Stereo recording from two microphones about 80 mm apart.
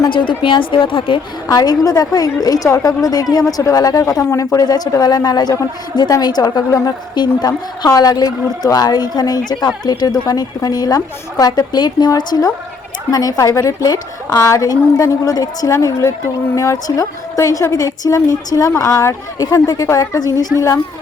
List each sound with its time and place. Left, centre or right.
0.1 s a woman's voice: left
1.5 s a woman's voice: left
4.6 s a woman's voice: left
19.6 s a woman's voice: left